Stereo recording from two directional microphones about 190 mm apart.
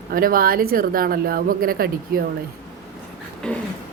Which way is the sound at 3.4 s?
5° left (ahead or behind).